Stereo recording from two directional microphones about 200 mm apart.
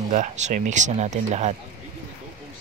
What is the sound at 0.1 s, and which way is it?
Speech, 40° right (ahead or behind).